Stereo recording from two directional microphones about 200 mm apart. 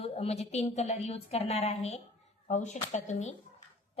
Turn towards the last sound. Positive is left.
turn(degrees=35)  # may be behind; listen again after turning